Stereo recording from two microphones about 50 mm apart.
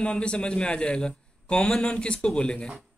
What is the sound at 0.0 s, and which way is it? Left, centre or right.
A man's voice, left.